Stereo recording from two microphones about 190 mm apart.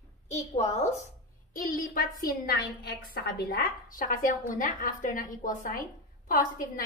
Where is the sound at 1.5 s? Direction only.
45° left (ahead or behind).